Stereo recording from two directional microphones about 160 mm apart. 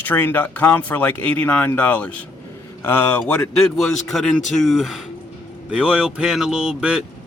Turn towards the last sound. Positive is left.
turn(degrees=-5)  # may be behind; listen again after turning